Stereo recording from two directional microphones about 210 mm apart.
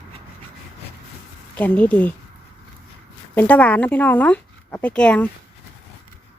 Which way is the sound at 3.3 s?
5° left (ahead or behind).